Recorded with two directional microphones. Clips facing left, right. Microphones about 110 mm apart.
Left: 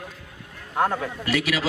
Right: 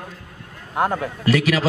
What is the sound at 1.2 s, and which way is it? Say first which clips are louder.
Speech: right 7 dB; 40° right (ahead or behind).